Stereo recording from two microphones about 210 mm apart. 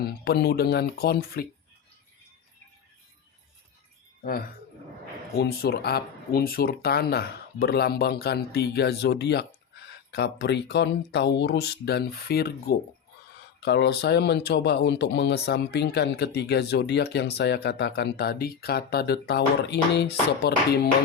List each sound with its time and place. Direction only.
0.0 s speech: 45° left (ahead or behind)
4.2 s speech: 45° left (ahead or behind)